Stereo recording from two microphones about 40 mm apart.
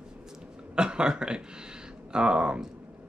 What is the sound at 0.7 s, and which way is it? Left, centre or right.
Speech, right.